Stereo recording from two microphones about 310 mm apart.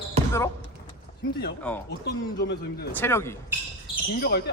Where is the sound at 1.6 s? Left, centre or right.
Centre.